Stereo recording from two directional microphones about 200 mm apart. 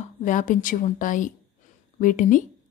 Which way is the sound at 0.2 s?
40° left (ahead or behind).